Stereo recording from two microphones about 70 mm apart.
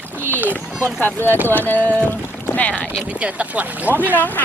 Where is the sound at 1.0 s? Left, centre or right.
Left.